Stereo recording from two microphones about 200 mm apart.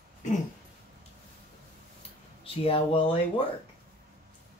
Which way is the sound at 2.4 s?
30° left (ahead or behind).